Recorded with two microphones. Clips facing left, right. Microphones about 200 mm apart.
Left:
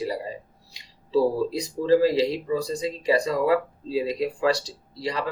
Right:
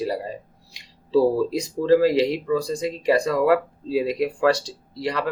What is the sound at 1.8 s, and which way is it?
Speech, 60° right (ahead or behind).